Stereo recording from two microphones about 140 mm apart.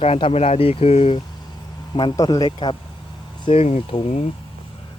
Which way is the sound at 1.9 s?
30° left (ahead or behind).